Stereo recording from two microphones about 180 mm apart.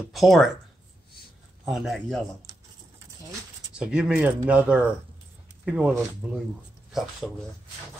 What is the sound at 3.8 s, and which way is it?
Speech, 5° right (ahead or behind).